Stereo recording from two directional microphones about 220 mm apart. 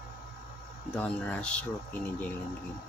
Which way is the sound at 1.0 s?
5° left (ahead or behind).